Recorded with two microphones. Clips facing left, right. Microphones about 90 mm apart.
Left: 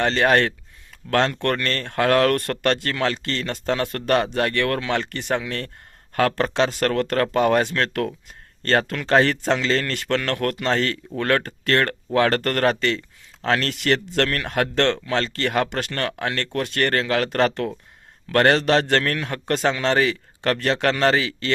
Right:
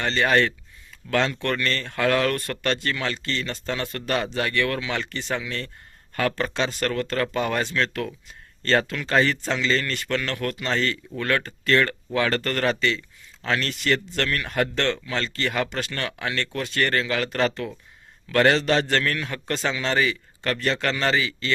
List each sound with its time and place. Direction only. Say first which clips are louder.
0.0 s speech: left 3 dB; 60° left (ahead or behind)